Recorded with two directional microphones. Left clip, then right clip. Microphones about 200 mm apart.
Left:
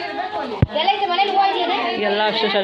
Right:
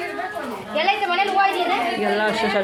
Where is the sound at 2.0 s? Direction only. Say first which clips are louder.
Left 2 dB; 5° right (ahead or behind).